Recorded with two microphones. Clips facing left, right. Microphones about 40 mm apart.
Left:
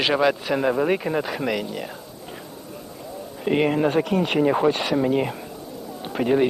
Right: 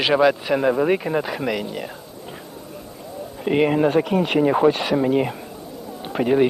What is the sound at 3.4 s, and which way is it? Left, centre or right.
A man's voice, centre.